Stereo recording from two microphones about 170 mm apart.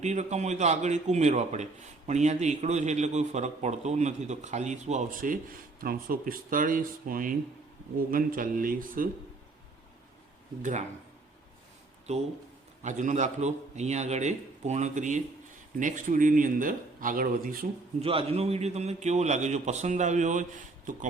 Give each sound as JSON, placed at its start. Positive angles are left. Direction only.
{"t": 0.0, "sound": "a man's voice", "side_deg": -40}
{"t": 10.6, "sound": "a man's voice", "side_deg": -45}
{"t": 12.1, "sound": "a man's voice", "side_deg": -40}
{"t": 18.0, "sound": "a man's voice", "side_deg": -35}